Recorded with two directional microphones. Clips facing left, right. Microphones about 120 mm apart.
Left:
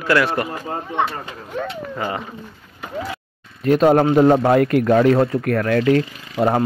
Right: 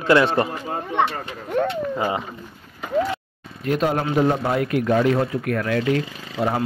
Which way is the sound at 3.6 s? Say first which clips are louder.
Left 8 dB; 45° left (ahead or behind).